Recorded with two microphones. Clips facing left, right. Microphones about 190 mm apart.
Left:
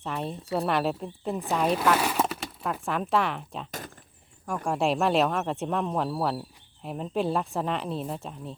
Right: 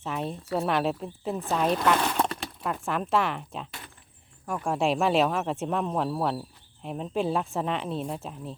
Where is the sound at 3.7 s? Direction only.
45° left (ahead or behind).